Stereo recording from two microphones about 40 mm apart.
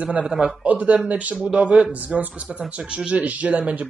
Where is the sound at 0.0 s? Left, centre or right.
Right.